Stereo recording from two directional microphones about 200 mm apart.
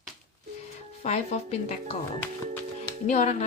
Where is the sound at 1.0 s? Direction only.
35° left (ahead or behind).